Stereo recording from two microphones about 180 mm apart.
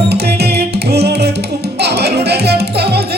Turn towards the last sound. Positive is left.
turn(degrees=-65)  # may be behind; listen again after turning